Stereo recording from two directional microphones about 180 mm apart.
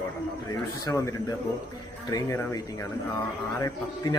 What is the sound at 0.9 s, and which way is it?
A man's voice, 15° left (ahead or behind).